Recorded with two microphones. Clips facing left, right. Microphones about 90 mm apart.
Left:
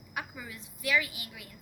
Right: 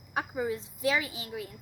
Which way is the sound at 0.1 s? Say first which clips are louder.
Right 9 dB; 35° right (ahead or behind).